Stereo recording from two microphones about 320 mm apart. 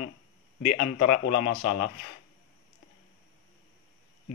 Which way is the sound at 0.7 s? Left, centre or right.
Left.